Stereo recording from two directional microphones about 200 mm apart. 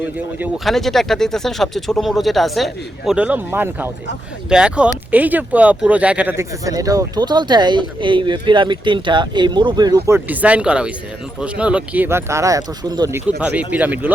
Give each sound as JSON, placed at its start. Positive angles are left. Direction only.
{"t": 0.3, "sound": "speech", "side_deg": -5}
{"t": 10.2, "sound": "speech", "side_deg": -5}